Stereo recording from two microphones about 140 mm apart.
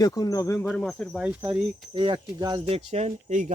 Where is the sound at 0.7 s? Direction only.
5° left (ahead or behind).